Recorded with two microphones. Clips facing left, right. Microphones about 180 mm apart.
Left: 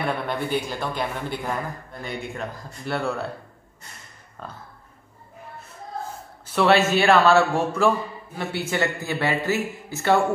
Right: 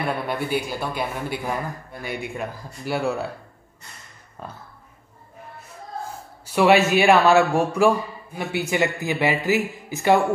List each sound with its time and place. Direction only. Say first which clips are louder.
0.0 s speech: right 1 dB; centre (ahead or behind)
4.4 s speech: right 1 dB; 10° right (ahead or behind)
6.5 s speech: right 2 dB; 10° right (ahead or behind)